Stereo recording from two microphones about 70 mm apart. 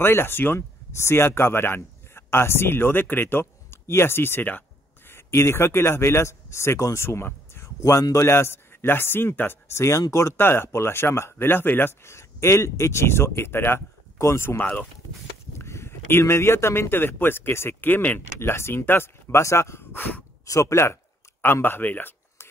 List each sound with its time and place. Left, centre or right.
0.0 s speech: left
5.1 s speech: left
9.7 s speech: left
14.6 s speech: left
15.5 s speech: left
18.4 s speech: left
20.4 s a sound: left